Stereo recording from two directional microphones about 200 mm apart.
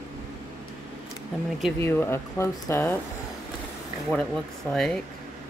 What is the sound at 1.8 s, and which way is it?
Speech, 10° left (ahead or behind).